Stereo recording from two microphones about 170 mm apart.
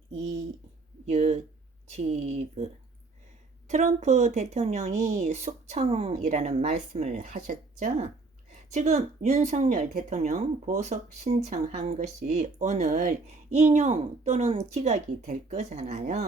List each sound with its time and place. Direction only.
1.0 s a woman's voice: 40° right (ahead or behind)
3.7 s a woman's voice: 45° right (ahead or behind)